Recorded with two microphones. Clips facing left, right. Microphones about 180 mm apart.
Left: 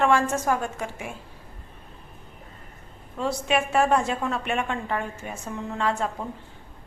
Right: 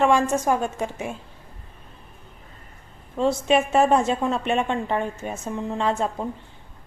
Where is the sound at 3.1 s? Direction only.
25° right (ahead or behind).